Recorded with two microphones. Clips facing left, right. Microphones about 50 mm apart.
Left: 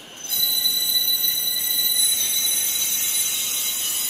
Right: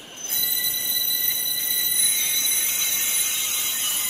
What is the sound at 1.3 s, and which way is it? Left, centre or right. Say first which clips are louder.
Train: left 2 dB; right.